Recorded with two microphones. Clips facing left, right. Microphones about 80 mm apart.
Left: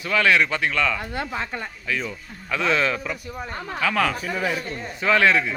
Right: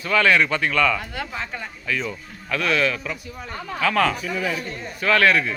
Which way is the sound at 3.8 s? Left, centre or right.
Centre.